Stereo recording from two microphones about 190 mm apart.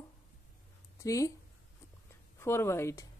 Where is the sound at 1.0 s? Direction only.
15° left (ahead or behind).